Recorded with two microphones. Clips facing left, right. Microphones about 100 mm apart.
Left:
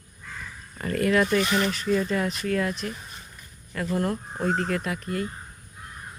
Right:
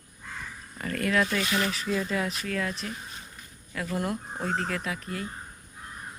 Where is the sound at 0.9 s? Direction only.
5° left (ahead or behind).